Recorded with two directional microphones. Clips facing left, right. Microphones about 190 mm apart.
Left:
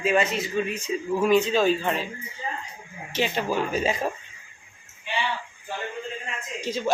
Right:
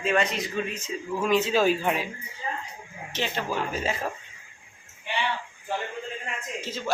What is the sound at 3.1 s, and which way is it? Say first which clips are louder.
Speech: left 4 dB; 15° left (ahead or behind).